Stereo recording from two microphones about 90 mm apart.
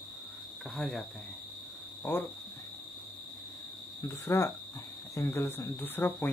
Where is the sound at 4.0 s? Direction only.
35° left (ahead or behind).